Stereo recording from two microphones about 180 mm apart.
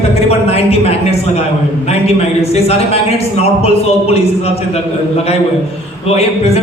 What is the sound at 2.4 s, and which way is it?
A man's voice, 35° left (ahead or behind).